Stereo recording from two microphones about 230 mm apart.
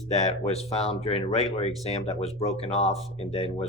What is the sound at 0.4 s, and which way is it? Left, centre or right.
Speech, left.